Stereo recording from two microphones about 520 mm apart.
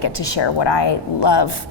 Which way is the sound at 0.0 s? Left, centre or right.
Left.